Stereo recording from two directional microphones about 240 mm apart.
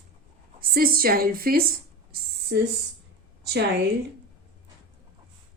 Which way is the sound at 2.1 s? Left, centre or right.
Right.